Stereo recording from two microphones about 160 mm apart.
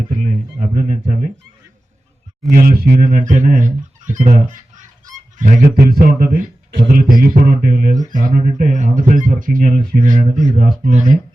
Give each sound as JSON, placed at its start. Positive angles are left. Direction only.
{"t": 0.2, "sound": "speech", "side_deg": -50}
{"t": 2.5, "sound": "speech", "side_deg": -65}
{"t": 3.0, "sound": "speech", "side_deg": -55}